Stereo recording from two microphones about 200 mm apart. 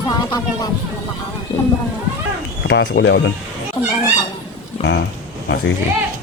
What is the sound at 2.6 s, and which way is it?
Speech, 60° left (ahead or behind).